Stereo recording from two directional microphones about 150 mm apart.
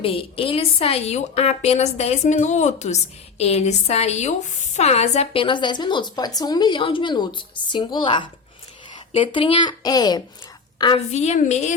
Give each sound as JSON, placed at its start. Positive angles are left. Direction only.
{"t": 0.0, "sound": "a woman's voice", "side_deg": 35}
{"t": 11.1, "sound": "a woman's voice", "side_deg": 50}